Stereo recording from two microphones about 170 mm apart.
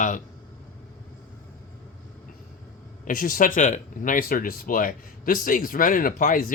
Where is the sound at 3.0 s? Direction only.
55° left (ahead or behind).